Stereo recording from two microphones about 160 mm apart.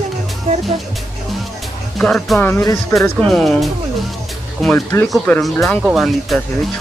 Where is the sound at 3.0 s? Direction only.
5° left (ahead or behind).